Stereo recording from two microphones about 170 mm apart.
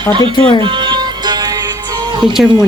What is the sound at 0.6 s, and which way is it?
Music, 25° right (ahead or behind).